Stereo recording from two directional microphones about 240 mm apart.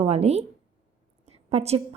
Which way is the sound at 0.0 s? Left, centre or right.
Right.